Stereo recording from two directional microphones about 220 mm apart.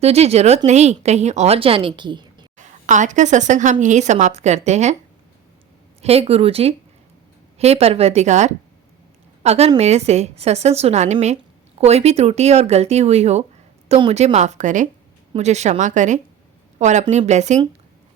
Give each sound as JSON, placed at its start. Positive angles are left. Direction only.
{"t": 0.0, "sound": "a woman's voice", "side_deg": -30}
{"t": 2.6, "sound": "a woman's voice", "side_deg": -35}
{"t": 6.0, "sound": "a woman's voice", "side_deg": -25}